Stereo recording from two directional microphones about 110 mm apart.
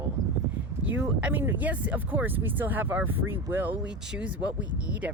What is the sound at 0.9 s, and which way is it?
Speech, 20° right (ahead or behind).